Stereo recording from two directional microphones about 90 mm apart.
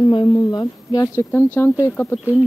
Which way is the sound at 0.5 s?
45° left (ahead or behind).